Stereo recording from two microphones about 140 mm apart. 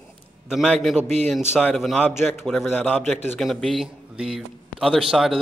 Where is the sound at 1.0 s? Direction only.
55° right (ahead or behind).